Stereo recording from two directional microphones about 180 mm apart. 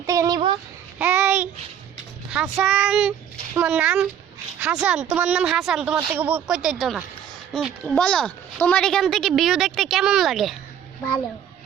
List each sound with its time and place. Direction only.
0.0 s a sound: 20° right (ahead or behind)
0.9 s babbling: 10° right (ahead or behind)
2.3 s speech: 5° right (ahead or behind)